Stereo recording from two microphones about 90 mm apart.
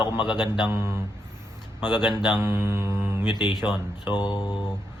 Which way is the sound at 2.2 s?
25° right (ahead or behind).